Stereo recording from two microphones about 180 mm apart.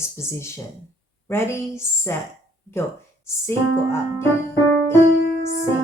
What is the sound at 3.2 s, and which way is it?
Speech, 15° left (ahead or behind).